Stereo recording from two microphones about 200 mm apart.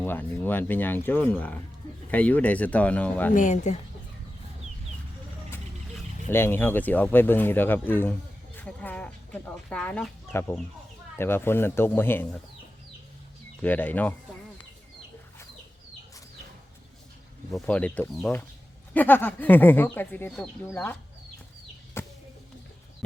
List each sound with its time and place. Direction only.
0.0 s speech: 10° left (ahead or behind)
3.3 s a woman's voice: 35° left (ahead or behind)
6.3 s speech: 10° left (ahead or behind)
13.6 s speech: 10° left (ahead or behind)
17.5 s speech: 5° left (ahead or behind)
22.0 s a sound: 10° left (ahead or behind)